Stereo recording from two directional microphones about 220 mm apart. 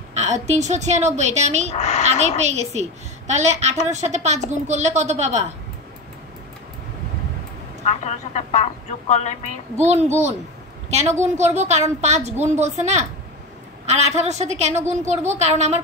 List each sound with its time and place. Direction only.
0.1 s a woman's voice: 30° right (ahead or behind)
1.7 s speech: 30° left (ahead or behind)
2.0 s a woman's voice: 30° right (ahead or behind)
8.0 s speech: 30° left (ahead or behind)
9.8 s a woman's voice: 30° right (ahead or behind)